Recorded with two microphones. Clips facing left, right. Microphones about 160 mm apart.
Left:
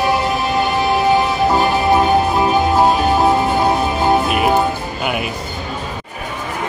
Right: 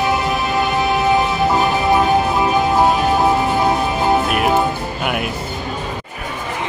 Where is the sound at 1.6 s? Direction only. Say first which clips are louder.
Left 1 dB; 20° left (ahead or behind).